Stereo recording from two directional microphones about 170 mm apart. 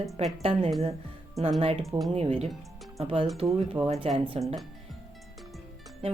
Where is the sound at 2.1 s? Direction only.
35° right (ahead or behind).